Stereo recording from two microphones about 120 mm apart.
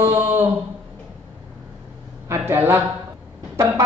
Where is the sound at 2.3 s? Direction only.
20° right (ahead or behind).